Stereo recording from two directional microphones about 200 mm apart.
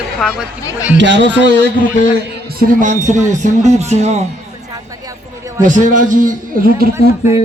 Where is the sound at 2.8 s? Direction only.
35° right (ahead or behind).